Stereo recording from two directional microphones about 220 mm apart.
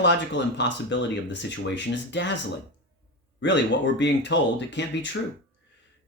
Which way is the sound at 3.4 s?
50° left (ahead or behind).